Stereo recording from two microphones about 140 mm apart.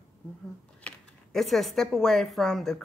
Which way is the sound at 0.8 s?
Centre (ahead or behind).